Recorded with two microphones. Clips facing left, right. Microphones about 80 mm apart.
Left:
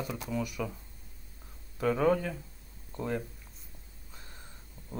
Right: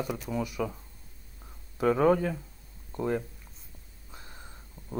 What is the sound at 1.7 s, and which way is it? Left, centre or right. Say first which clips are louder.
Speech: right 4 dB; centre.